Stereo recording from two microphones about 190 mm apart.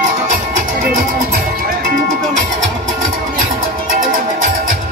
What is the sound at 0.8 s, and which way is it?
Music, 50° right (ahead or behind).